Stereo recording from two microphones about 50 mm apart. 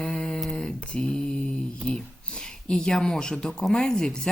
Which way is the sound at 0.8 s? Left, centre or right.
Centre.